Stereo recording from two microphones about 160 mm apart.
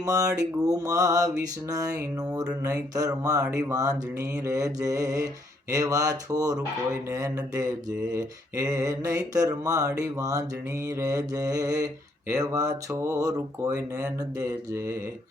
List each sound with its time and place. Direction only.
0.0 s mantra: 20° right (ahead or behind)